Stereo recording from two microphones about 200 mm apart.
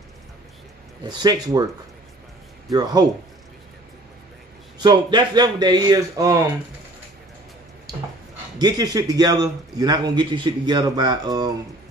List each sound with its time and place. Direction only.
1.0 s a man's voice: 20° right (ahead or behind)
2.7 s a man's voice: 20° right (ahead or behind)
4.7 s a man's voice: 20° right (ahead or behind)
8.5 s a man's voice: 20° right (ahead or behind)